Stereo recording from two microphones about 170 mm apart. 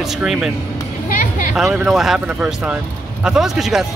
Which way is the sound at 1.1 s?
50° left (ahead or behind).